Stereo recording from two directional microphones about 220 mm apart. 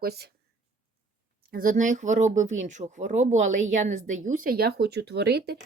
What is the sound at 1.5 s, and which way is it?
Speech, 40° right (ahead or behind).